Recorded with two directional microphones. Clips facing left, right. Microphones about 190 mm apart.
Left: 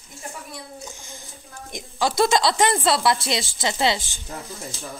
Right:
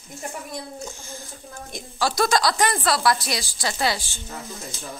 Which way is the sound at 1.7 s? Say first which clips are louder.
Left 2 dB; 20° left (ahead or behind).